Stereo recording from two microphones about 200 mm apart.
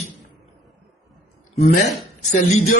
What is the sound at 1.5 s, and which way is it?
Speech, 35° left (ahead or behind).